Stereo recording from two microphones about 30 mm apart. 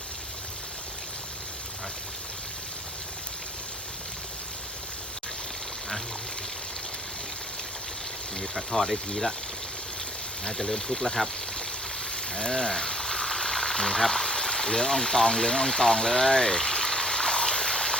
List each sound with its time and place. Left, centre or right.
8.4 s speech: centre
10.4 s speech: centre
12.1 s frying: left